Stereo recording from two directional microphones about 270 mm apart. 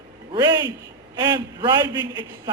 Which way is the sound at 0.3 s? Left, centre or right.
Centre.